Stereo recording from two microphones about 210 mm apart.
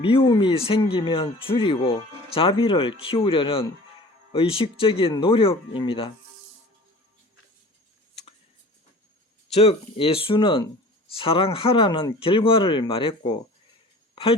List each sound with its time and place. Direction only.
0.0 s speech: 25° left (ahead or behind)
9.5 s speech: 30° left (ahead or behind)